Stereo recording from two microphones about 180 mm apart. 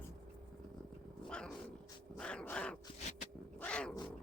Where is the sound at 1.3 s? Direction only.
5° left (ahead or behind).